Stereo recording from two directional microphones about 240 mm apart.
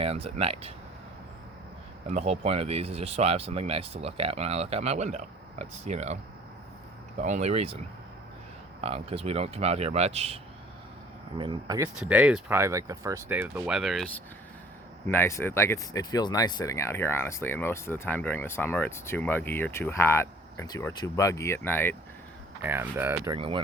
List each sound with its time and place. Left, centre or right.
0.0 s speech: right
2.0 s speech: right
7.2 s speech: right
8.8 s speech: right
11.9 s speech: centre
15.0 s speech: centre
22.6 s speech: centre